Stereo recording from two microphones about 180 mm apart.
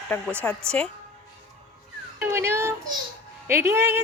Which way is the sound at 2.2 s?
15° right (ahead or behind).